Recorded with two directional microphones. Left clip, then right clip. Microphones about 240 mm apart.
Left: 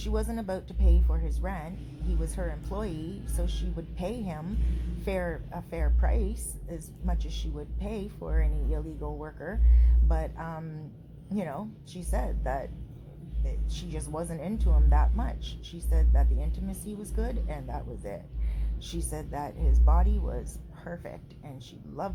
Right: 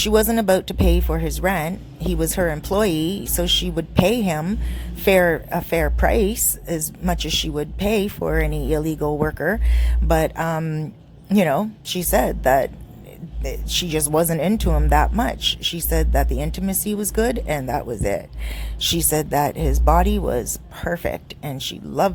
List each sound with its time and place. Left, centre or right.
0.0 s speech: right